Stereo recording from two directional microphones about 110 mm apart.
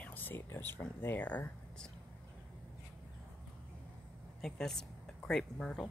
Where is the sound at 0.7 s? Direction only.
15° left (ahead or behind).